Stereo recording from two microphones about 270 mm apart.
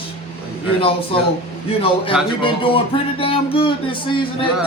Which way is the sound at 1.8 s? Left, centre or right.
Centre.